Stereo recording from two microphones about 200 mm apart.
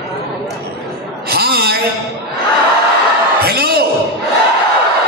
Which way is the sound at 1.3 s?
50° right (ahead or behind).